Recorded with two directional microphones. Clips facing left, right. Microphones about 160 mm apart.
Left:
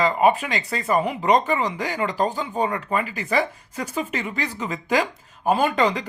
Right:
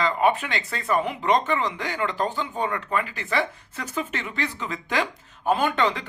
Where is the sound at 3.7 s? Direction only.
10° left (ahead or behind).